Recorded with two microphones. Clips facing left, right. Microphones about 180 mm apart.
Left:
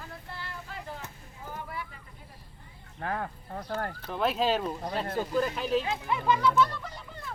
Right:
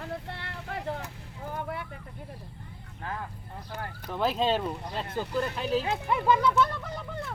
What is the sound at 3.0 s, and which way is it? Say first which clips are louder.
Speech: left 4 dB; 55° left (ahead or behind).